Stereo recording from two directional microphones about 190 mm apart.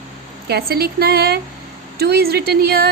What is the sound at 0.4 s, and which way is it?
A woman's voice, 55° right (ahead or behind).